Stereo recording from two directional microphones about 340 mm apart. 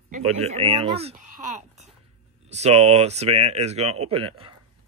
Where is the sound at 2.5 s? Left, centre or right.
Centre.